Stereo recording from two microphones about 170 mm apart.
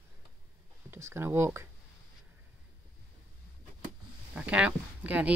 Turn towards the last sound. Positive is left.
turn(degrees=-10)  # may be behind; listen again after turning